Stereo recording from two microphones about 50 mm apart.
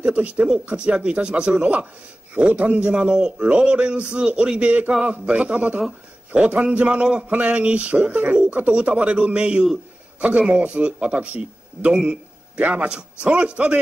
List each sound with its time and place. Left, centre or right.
0.0 s a man's voice: right
12.5 s a man's voice: right
12.8 s a man's voice: right